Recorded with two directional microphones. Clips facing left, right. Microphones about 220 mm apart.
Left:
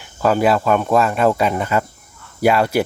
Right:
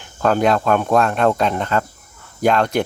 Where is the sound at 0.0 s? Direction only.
5° left (ahead or behind).